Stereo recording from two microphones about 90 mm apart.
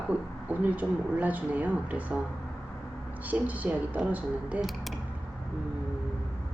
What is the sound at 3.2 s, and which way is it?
Speech, 15° right (ahead or behind).